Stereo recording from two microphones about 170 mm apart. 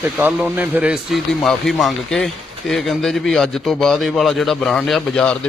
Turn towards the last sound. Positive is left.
turn(degrees=5)  # may be behind; listen again after turning